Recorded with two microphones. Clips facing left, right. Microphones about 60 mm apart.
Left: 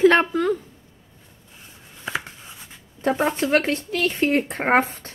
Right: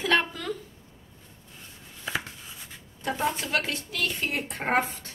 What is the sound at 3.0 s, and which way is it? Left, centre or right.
Speech, left.